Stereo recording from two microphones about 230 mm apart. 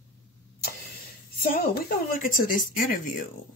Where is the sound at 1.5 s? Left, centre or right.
Left.